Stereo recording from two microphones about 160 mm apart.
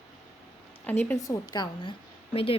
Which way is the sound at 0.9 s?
10° left (ahead or behind).